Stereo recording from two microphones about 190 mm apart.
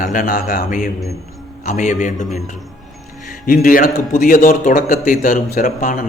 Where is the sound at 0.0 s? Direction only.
45° left (ahead or behind).